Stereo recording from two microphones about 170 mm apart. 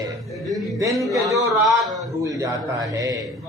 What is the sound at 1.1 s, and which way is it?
A man's voice, 20° right (ahead or behind).